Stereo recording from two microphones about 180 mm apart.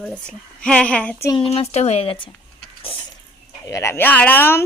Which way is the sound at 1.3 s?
30° left (ahead or behind).